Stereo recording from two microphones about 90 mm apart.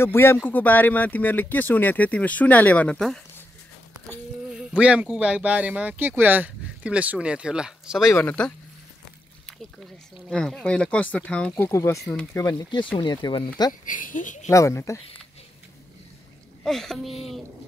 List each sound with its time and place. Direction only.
0.0 s speech: 25° left (ahead or behind)
4.5 s speech: 10° right (ahead or behind)
8.2 s speech: 20° left (ahead or behind)
10.3 s speech: 10° left (ahead or behind)
11.5 s speech: 25° left (ahead or behind)
13.0 s speech: 60° left (ahead or behind)
14.5 s speech: 35° left (ahead or behind)
16.6 s speech: 5° left (ahead or behind)